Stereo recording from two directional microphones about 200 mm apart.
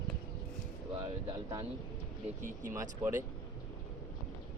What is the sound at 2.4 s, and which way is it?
Speech, 40° right (ahead or behind).